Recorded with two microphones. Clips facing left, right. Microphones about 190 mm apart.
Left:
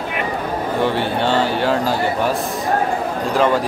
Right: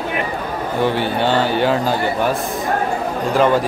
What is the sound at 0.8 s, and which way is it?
Speech, centre (ahead or behind).